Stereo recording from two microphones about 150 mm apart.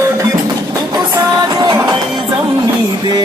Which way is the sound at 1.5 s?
30° right (ahead or behind).